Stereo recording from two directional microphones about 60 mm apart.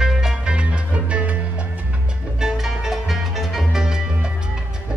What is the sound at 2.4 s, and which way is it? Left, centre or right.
Music, centre.